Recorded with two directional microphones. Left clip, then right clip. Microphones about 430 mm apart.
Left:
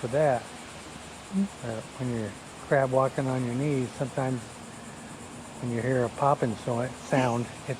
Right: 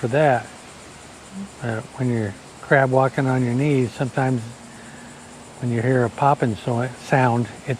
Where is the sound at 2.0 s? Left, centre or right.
Right.